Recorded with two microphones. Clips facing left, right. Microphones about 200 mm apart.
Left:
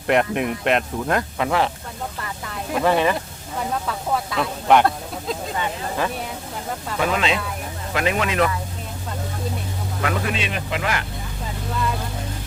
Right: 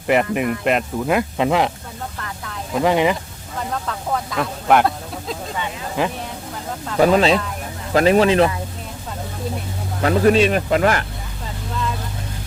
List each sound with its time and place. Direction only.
0.1 s speech: centre (ahead or behind)
1.4 s speech: 15° right (ahead or behind)
2.8 s speech: 15° right (ahead or behind)
3.8 s speech: 5° left (ahead or behind)
6.0 s speech: 15° right (ahead or behind)
7.0 s speech: 35° right (ahead or behind)
10.0 s speech: 35° right (ahead or behind)